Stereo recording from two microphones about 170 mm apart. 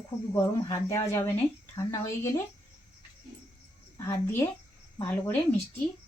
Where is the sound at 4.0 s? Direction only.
15° left (ahead or behind).